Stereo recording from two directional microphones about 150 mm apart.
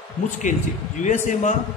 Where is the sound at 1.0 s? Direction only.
55° left (ahead or behind).